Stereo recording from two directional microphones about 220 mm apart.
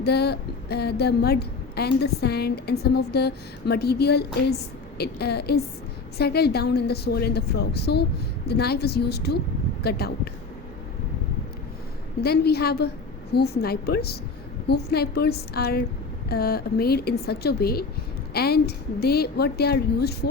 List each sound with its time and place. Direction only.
0.0 s a woman's voice: 50° left (ahead or behind)
12.2 s a woman's voice: 45° left (ahead or behind)